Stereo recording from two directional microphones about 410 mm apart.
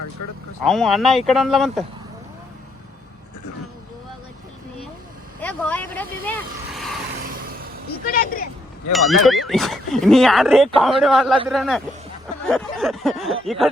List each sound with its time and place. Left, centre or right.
0.2 s speech: left
0.6 s speech: centre
5.4 s speech: centre
6.2 s vehicle: centre
8.0 s speech: left
8.9 s speech: centre